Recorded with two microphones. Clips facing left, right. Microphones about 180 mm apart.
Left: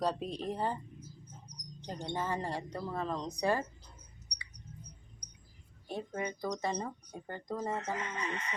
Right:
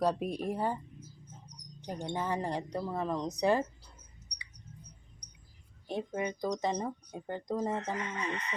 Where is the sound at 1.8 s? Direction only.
10° right (ahead or behind).